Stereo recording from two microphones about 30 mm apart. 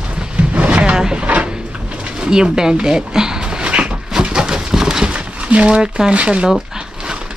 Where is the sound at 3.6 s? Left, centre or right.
Right.